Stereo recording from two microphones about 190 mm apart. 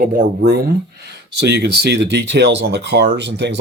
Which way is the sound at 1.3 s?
65° right (ahead or behind).